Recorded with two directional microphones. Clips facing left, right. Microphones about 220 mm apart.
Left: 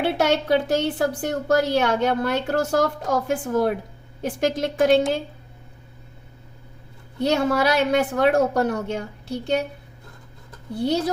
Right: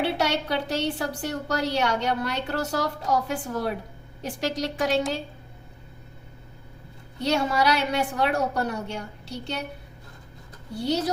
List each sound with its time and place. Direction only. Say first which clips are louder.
0.0 s a woman's voice: left 4 dB; 55° left (ahead or behind)
7.2 s a woman's voice: left 4 dB; 55° left (ahead or behind)